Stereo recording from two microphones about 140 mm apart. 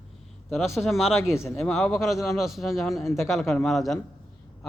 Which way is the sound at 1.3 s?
20° left (ahead or behind).